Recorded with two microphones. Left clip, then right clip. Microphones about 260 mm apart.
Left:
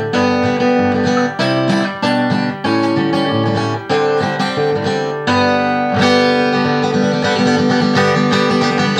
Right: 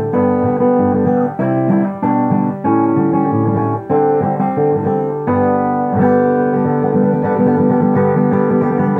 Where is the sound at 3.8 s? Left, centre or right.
Centre.